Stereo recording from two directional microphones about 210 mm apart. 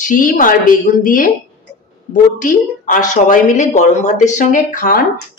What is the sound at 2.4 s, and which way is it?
Speech, 40° left (ahead or behind).